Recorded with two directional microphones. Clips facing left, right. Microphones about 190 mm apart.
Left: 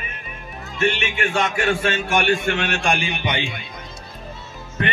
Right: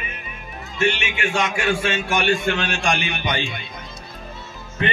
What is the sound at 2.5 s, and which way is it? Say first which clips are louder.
Speech: left 1 dB; 60° left (ahead or behind).